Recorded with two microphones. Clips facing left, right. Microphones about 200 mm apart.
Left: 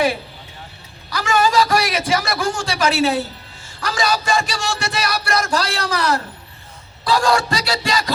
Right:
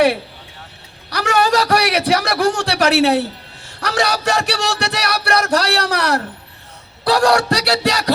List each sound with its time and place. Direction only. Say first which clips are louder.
1.1 s a man's voice: right 1 dB; 65° right (ahead or behind)
7.0 s music: right 3 dB; 65° right (ahead or behind)